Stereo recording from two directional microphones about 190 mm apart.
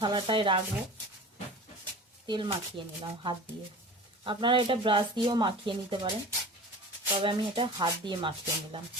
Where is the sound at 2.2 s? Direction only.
25° right (ahead or behind).